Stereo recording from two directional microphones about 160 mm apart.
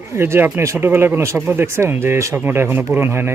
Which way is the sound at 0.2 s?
15° right (ahead or behind).